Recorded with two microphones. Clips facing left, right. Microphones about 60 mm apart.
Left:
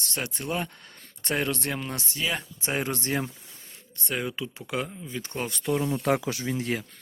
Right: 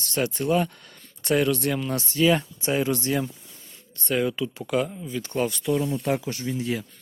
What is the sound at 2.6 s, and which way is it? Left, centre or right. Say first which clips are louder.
Speech: right 2 dB; left.